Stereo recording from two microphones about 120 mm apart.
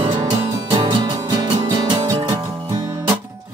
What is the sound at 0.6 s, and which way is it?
Music, 45° right (ahead or behind).